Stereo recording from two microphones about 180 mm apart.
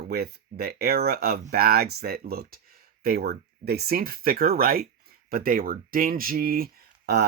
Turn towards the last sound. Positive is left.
turn(degrees=-60)  # may be behind; listen again after turning